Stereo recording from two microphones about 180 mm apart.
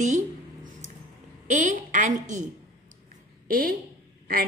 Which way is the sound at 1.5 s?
45° right (ahead or behind).